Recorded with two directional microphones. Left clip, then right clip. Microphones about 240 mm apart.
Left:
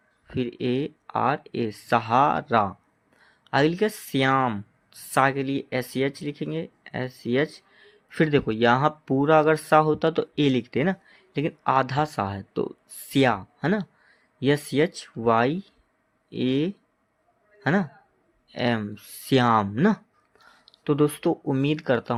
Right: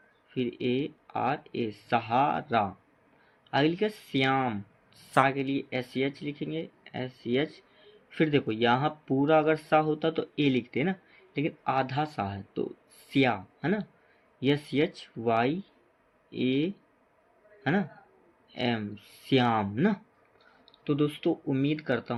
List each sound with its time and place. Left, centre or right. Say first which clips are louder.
0.3 s a man's voice: left 3 dB; left